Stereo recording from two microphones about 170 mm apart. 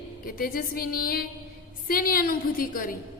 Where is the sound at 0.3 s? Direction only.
60° left (ahead or behind).